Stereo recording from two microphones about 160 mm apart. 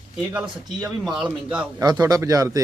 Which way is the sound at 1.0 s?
5° right (ahead or behind).